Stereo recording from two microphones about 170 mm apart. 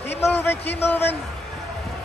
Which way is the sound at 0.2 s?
15° left (ahead or behind).